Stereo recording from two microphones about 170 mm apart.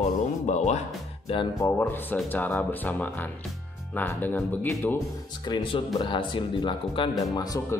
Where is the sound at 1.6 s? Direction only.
15° left (ahead or behind).